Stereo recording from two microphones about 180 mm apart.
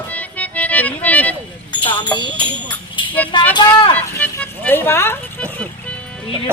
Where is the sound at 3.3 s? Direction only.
25° left (ahead or behind).